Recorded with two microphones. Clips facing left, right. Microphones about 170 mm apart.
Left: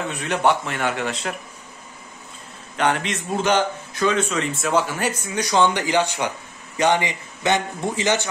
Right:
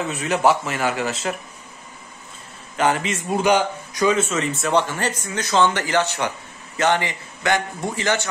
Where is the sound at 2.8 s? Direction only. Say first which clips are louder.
Right 1 dB; 5° right (ahead or behind).